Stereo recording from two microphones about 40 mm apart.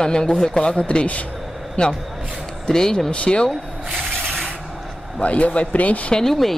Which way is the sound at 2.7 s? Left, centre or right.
Centre.